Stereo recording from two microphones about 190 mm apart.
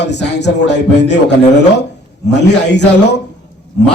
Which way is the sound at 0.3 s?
65° left (ahead or behind).